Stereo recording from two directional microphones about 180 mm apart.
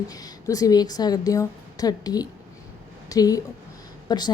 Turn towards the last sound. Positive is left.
turn(degrees=25)  # may be behind; listen again after turning